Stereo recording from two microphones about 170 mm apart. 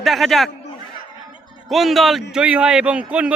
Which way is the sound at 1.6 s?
Centre (ahead or behind).